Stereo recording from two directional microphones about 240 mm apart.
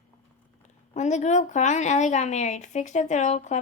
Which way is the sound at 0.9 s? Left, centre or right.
Left.